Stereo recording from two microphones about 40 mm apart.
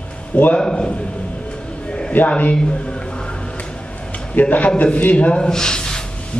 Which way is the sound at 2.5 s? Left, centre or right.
Left.